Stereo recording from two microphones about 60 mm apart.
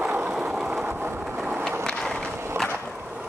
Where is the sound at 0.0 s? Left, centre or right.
Right.